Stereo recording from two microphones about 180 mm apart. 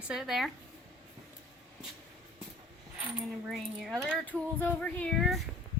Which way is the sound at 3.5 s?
Centre (ahead or behind).